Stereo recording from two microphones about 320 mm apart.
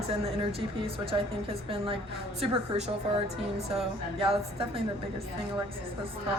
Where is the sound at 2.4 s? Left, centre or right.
Centre.